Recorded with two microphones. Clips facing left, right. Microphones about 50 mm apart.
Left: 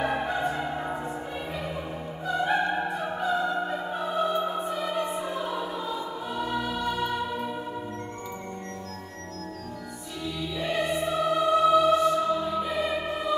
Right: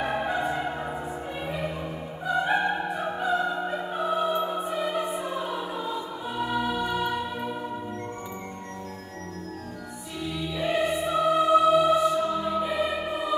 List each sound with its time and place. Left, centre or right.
0.0 s music: centre
2.2 s opera: centre
10.5 s music: centre